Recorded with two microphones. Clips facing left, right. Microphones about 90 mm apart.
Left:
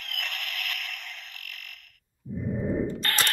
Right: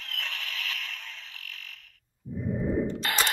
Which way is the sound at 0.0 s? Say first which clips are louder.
Left 1 dB; 65° left (ahead or behind).